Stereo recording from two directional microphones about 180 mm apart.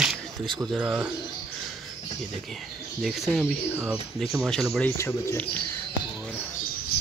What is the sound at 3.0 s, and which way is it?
Speech, centre (ahead or behind).